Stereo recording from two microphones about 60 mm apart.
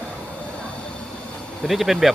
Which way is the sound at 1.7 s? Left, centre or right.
Centre.